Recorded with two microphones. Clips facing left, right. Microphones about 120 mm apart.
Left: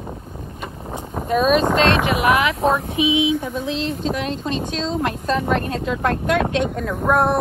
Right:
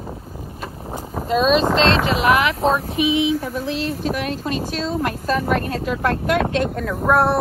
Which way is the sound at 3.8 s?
25° left (ahead or behind).